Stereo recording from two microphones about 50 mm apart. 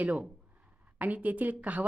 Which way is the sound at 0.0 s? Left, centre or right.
Right.